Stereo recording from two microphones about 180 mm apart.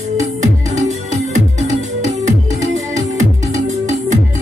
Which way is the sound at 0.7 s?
40° right (ahead or behind).